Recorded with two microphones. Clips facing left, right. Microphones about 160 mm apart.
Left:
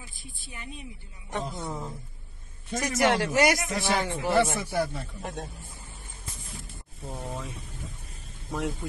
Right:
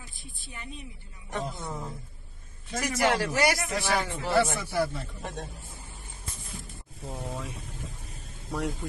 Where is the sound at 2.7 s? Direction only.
20° left (ahead or behind).